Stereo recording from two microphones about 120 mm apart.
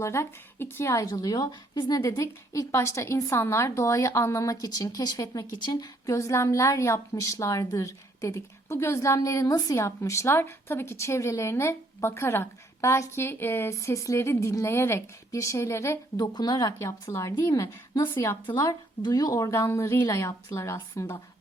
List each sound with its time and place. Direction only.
0.0 s a woman's voice: 25° left (ahead or behind)
1.1 s a woman's voice: 30° left (ahead or behind)
2.0 s a woman's voice: 25° left (ahead or behind)
16.2 s a woman's voice: 35° left (ahead or behind)
18.5 s a woman's voice: 35° left (ahead or behind)